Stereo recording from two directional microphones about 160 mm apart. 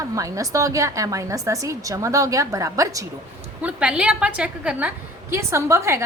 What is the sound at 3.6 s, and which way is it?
A woman's voice, 5° right (ahead or behind).